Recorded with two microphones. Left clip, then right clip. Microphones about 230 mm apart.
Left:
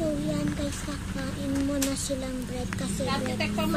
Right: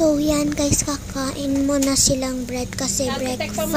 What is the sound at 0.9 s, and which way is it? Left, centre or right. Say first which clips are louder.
Speech: right 9 dB; right.